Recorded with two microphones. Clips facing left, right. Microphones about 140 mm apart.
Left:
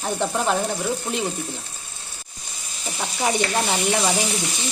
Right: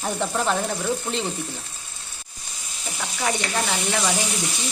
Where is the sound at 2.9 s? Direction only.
20° left (ahead or behind).